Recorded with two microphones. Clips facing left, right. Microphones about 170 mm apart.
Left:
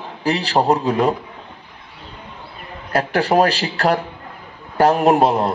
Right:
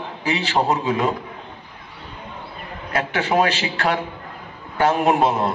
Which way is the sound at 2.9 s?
40° left (ahead or behind).